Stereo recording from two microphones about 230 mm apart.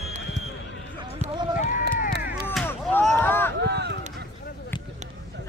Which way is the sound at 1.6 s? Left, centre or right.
Left.